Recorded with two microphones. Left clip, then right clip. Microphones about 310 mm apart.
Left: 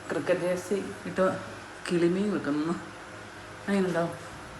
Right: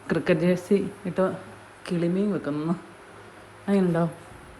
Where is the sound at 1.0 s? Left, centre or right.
Centre.